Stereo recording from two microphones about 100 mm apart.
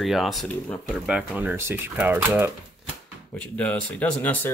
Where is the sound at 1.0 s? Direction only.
10° right (ahead or behind).